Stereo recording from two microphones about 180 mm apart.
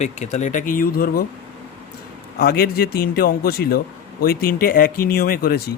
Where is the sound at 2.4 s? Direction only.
55° left (ahead or behind).